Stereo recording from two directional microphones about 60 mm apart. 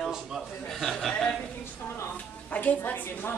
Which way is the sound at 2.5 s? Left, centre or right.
Left.